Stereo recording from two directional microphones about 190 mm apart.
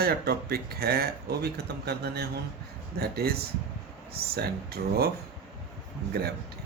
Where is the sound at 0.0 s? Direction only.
55° right (ahead or behind).